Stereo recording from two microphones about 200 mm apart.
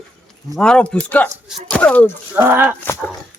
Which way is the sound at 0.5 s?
5° left (ahead or behind).